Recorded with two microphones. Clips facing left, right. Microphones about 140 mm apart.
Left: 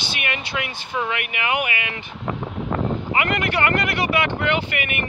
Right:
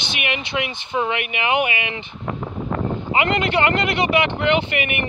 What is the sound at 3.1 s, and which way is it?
Speech, 25° right (ahead or behind).